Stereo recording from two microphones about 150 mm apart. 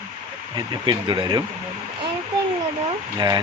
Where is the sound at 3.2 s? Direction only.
30° right (ahead or behind).